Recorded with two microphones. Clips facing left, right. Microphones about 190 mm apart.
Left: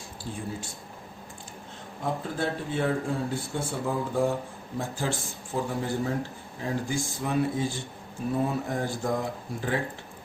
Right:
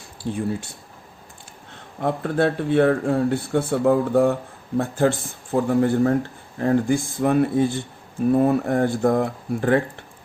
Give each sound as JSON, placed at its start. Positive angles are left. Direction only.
{"t": 0.2, "sound": "speech", "side_deg": -70}
{"t": 2.0, "sound": "speech", "side_deg": -65}